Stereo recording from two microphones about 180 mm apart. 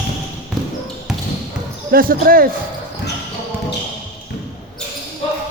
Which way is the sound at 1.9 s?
50° right (ahead or behind).